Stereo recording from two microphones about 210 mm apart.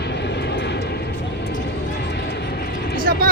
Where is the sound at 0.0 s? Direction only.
55° left (ahead or behind).